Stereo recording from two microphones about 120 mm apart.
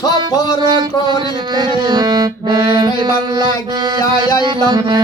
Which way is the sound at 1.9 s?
35° right (ahead or behind).